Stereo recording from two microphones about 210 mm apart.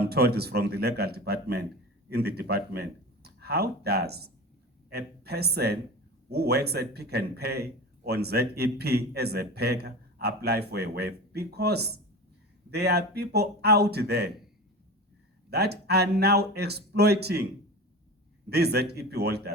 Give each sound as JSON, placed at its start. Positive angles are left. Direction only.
{"t": 0.0, "sound": "a man's voice", "side_deg": -50}
{"t": 15.4, "sound": "a man's voice", "side_deg": -50}
{"t": 18.4, "sound": "a man's voice", "side_deg": -50}